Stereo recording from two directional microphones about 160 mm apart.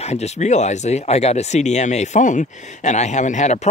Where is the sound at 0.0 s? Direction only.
45° left (ahead or behind).